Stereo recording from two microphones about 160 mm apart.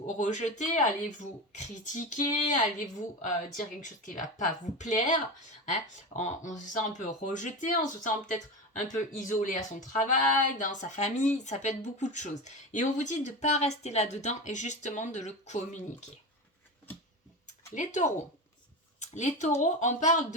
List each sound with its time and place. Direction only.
0.0 s a woman's voice: 50° left (ahead or behind)
17.7 s a woman's voice: 50° left (ahead or behind)